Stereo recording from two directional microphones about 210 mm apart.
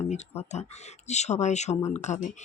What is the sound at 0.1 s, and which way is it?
Speech, 30° left (ahead or behind).